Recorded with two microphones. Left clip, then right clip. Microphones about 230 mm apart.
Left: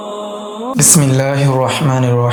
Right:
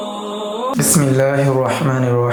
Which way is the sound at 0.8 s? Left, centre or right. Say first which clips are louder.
Left 3 dB; left.